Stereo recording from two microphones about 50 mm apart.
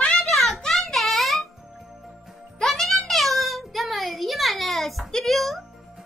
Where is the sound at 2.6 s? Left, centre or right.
Centre.